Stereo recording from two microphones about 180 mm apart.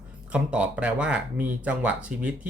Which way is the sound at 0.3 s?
5° right (ahead or behind).